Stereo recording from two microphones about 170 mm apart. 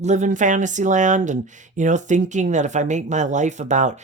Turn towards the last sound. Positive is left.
turn(degrees=-45)  # may be behind; listen again after turning